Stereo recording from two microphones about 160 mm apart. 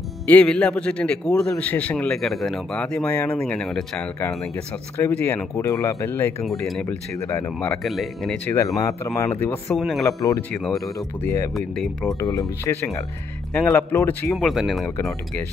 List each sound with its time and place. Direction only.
0.3 s a man's voice: 5° left (ahead or behind)
4.9 s speech: 15° left (ahead or behind)
6.4 s a man's voice: centre (ahead or behind)
7.2 s speech: 20° left (ahead or behind)
7.8 s a man's voice: centre (ahead or behind)
8.5 s speech: 20° left (ahead or behind)
9.7 s a man's voice: centre (ahead or behind)
10.0 s speech: 20° left (ahead or behind)
10.5 s a man's voice: centre (ahead or behind)
11.2 s speech: 20° left (ahead or behind)
11.5 s a man's voice: centre (ahead or behind)
12.2 s speech: 20° left (ahead or behind)
14.3 s a man's voice: centre (ahead or behind)